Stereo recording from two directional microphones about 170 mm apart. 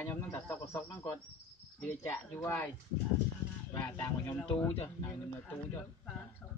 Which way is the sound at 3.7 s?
15° left (ahead or behind).